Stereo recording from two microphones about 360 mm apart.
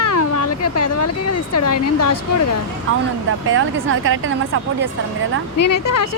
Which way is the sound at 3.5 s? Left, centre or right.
Right.